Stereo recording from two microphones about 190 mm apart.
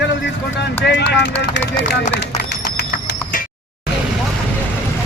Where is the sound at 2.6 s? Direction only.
55° left (ahead or behind).